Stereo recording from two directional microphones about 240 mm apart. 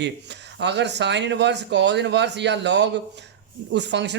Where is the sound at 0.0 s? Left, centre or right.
Right.